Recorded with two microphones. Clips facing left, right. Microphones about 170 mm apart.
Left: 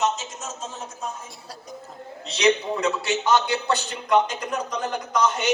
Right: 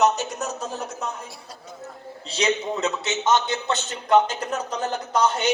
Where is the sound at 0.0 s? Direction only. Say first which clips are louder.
Right 5 dB; 65° right (ahead or behind).